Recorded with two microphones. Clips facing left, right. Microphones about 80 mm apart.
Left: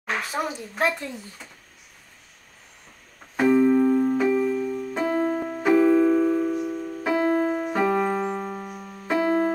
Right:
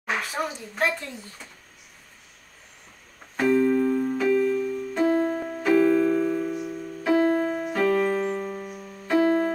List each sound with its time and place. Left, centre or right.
0.5 s a woman's voice: centre
3.3 s keyboard: centre
5.6 s music: centre
7.1 s keyboard: left